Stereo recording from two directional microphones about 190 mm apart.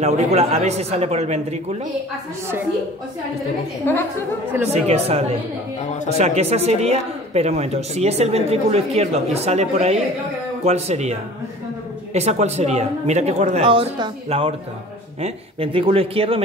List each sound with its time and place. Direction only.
0.0 s speech: 35° right (ahead or behind)
4.7 s speech: 35° right (ahead or behind)